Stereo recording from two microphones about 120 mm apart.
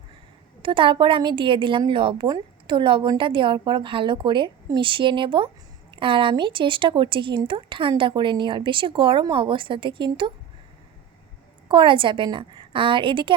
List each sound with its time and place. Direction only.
0.6 s a woman's voice: 45° right (ahead or behind)
11.7 s a woman's voice: 45° right (ahead or behind)